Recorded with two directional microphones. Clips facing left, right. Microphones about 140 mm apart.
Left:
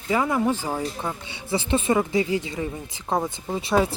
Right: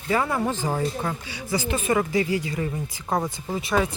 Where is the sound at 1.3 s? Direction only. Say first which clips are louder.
Left 5 dB; 25° left (ahead or behind).